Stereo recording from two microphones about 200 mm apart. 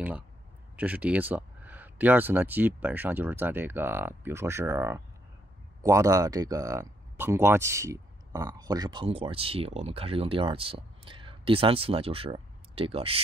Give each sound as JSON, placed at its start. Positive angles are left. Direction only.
{"t": 0.7, "sound": "speech", "side_deg": -5}